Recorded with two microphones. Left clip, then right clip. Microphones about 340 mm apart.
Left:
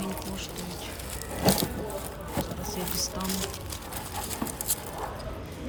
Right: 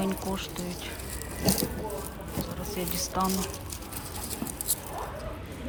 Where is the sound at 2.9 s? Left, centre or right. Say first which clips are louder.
Right 6 dB; centre.